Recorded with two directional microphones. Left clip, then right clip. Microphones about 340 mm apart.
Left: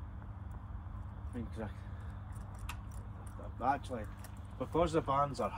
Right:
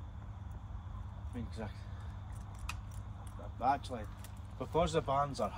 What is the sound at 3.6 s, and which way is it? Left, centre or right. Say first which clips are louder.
Speech: right 1 dB; right.